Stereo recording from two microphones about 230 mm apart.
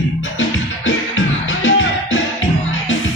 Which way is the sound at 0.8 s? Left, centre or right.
Left.